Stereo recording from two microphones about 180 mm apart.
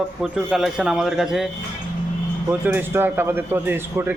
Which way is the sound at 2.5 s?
10° right (ahead or behind).